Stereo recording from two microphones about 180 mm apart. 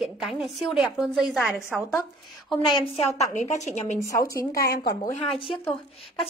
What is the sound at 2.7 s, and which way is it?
A woman's voice, 30° left (ahead or behind).